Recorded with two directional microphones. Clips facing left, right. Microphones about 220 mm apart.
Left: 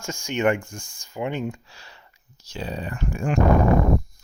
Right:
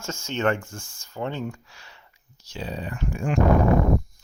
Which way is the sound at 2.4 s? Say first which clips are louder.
Left 1 dB; 45° left (ahead or behind).